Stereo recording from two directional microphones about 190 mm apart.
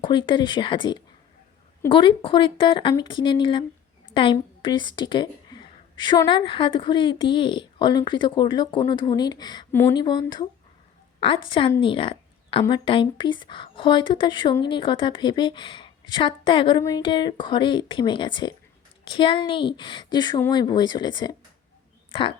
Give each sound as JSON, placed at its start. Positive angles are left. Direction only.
{"t": 0.0, "sound": "a woman's voice", "side_deg": 25}